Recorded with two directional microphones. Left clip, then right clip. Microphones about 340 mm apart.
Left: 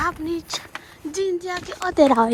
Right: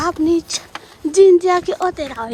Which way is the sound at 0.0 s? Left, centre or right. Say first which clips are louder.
Right 7 dB; centre.